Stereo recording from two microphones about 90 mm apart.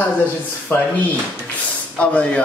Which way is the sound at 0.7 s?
25° left (ahead or behind).